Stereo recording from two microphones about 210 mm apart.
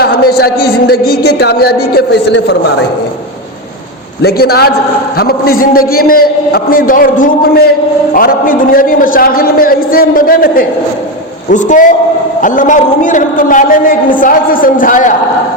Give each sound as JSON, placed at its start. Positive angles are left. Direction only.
{"t": 0.0, "sound": "a man's voice", "side_deg": 45}
{"t": 4.2, "sound": "a man's voice", "side_deg": 50}